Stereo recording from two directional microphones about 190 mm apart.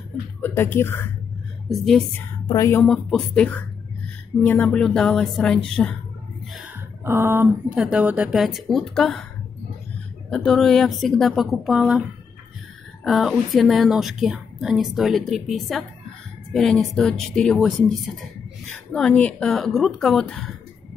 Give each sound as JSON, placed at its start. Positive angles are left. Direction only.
{"t": 0.4, "sound": "speech", "side_deg": 10}
{"t": 1.7, "sound": "a woman's voice", "side_deg": 0}
{"t": 2.4, "sound": "a woman's voice", "side_deg": 15}
{"t": 2.8, "sound": "a woman's voice", "side_deg": 5}
{"t": 6.5, "sound": "a woman's voice", "side_deg": -10}
{"t": 10.3, "sound": "a woman's voice", "side_deg": 0}
{"t": 13.0, "sound": "a woman's voice", "side_deg": 0}